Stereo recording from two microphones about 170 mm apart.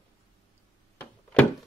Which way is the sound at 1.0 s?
5° left (ahead or behind).